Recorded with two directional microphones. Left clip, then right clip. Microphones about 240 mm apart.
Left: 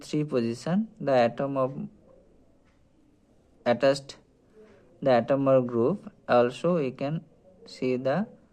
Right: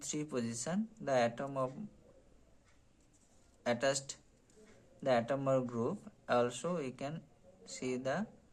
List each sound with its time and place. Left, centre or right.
0.0 s speech: left
3.6 s speech: left